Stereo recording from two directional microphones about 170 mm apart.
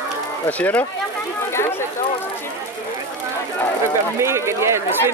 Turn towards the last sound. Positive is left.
turn(degrees=-15)  # may be behind; listen again after turning